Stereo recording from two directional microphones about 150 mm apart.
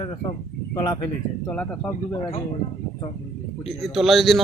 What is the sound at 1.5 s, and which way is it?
Speech, 10° left (ahead or behind).